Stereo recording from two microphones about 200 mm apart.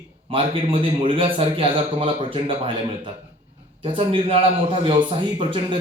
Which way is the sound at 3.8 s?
25° right (ahead or behind).